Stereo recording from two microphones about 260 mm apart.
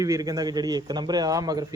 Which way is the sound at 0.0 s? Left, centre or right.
Centre.